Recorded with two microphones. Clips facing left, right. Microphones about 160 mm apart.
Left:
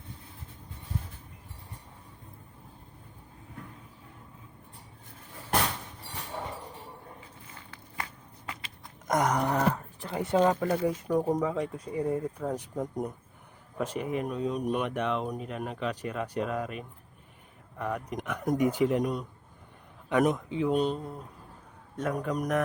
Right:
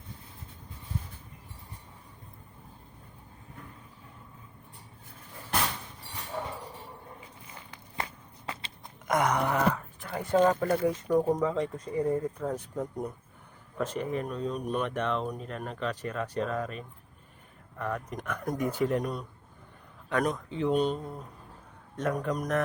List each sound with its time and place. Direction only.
7.4 s a sound: 15° right (ahead or behind)
9.0 s wail: 40° left (ahead or behind)
10.1 s speech: 20° left (ahead or behind)
10.5 s speech: 5° left (ahead or behind)
20.3 s speech: 5° left (ahead or behind)